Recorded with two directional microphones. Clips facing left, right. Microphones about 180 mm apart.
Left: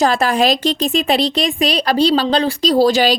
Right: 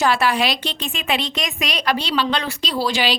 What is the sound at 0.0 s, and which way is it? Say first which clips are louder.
Speech: left 4 dB; 40° left (ahead or behind).